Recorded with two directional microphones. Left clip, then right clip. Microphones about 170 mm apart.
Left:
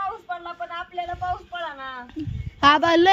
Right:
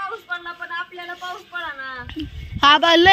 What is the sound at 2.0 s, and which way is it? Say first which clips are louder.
Speech: right 3 dB; 5° left (ahead or behind).